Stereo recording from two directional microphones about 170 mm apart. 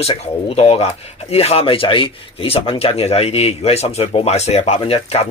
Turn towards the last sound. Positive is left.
turn(degrees=35)  # may be behind; listen again after turning